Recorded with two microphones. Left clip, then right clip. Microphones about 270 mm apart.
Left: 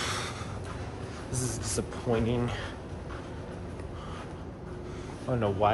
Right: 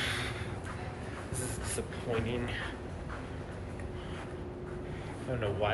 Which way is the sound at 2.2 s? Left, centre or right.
Left.